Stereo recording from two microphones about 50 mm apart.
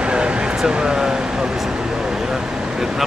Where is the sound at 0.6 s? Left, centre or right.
Centre.